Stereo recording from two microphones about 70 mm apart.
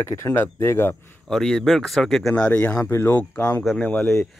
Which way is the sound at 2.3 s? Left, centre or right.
Centre.